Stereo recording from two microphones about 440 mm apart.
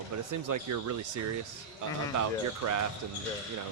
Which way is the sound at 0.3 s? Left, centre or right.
Right.